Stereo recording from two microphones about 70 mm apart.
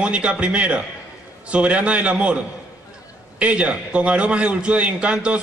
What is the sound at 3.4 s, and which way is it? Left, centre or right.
A man's voice, centre.